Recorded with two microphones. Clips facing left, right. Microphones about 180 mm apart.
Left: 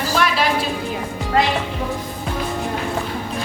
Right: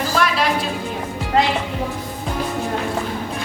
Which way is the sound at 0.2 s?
Centre (ahead or behind).